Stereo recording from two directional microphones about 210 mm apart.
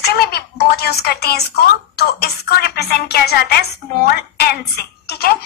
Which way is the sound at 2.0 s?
50° left (ahead or behind).